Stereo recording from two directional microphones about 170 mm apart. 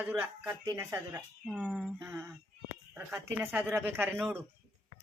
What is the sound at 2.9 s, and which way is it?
A woman's voice, 5° right (ahead or behind).